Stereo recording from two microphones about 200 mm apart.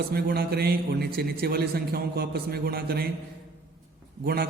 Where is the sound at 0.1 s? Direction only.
50° right (ahead or behind).